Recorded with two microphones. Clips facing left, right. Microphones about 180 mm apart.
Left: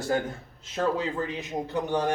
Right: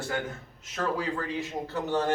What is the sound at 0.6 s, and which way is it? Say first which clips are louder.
A man's voice: left 3 dB; 25° left (ahead or behind).